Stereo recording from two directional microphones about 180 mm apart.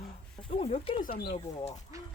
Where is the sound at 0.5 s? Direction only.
35° left (ahead or behind).